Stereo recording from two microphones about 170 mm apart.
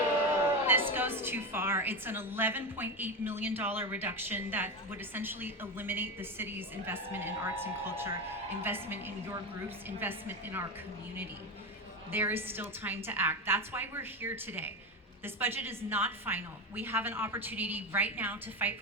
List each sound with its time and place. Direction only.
0.6 s a woman's voice: 15° right (ahead or behind)
12.1 s a woman's voice: 15° right (ahead or behind)